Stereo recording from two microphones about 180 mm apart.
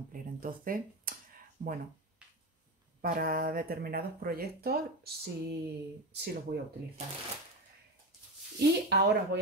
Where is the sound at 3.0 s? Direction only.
55° right (ahead or behind).